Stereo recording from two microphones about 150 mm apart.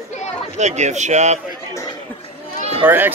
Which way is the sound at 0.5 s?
50° right (ahead or behind).